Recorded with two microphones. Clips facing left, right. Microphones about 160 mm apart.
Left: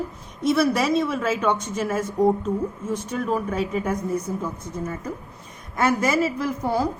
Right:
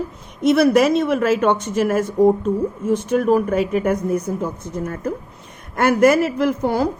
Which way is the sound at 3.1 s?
70° right (ahead or behind).